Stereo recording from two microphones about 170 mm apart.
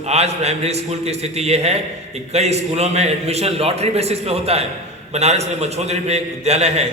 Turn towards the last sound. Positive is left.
turn(degrees=-40)  # may be behind; listen again after turning